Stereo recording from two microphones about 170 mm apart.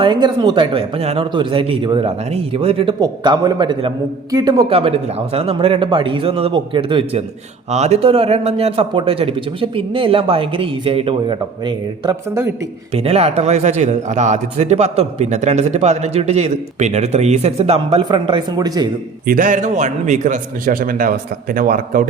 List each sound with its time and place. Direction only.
0.0 s a man's voice: 25° right (ahead or behind)
4.7 s a man's voice: 35° right (ahead or behind)
12.9 s a man's voice: 35° right (ahead or behind)
19.2 s a man's voice: 55° right (ahead or behind)